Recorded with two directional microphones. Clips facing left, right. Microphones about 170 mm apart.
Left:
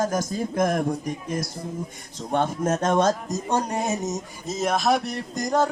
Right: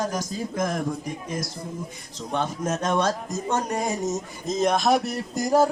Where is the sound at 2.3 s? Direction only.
50° left (ahead or behind); by 4.1 s 25° left (ahead or behind).